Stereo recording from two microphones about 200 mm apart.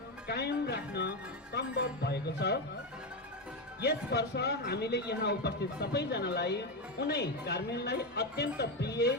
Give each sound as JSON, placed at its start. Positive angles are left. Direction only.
{"t": 0.3, "sound": "speech", "side_deg": 55}
{"t": 3.8, "sound": "speech", "side_deg": 55}